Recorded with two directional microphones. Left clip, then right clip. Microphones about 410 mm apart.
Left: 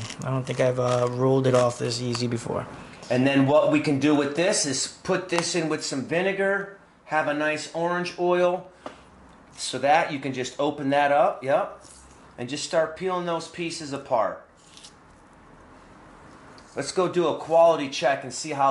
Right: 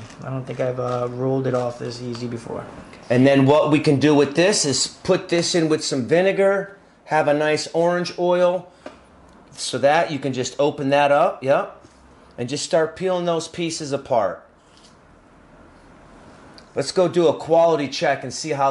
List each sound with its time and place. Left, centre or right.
0.2 s speech: left
3.1 s speech: right
9.6 s speech: right
16.7 s speech: right